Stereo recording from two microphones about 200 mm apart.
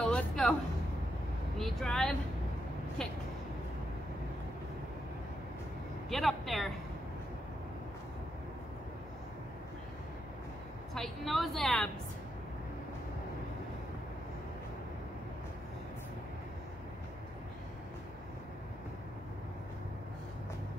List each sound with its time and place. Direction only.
0.0 s music: 5° left (ahead or behind)
1.6 s a woman's voice: centre (ahead or behind)
6.0 s a woman's voice: centre (ahead or behind)
11.0 s a woman's voice: centre (ahead or behind)